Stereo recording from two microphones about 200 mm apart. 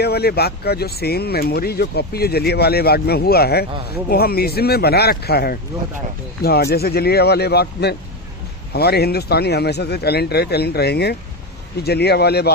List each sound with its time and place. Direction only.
0.0 s speech: 55° left (ahead or behind)